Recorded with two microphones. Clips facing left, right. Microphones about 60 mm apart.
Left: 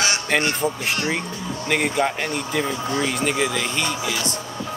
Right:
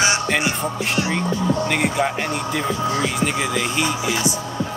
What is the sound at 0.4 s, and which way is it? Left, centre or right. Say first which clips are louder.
A man's voice: even; centre.